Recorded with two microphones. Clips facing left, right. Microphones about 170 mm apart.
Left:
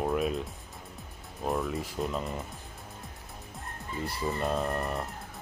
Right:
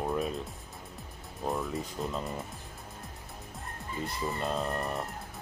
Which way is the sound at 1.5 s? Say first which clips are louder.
Left 2 dB; centre (ahead or behind).